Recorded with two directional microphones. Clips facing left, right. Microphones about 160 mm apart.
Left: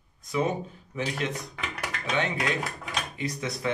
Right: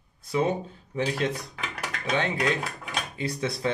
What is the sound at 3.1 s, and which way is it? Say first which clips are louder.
Speech: right 5 dB; 30° right (ahead or behind).